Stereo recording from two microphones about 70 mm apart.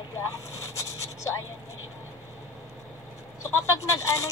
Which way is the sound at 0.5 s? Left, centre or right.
Left.